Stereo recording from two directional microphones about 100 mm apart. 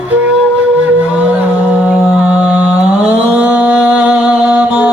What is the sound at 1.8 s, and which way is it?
Mantra, 10° right (ahead or behind).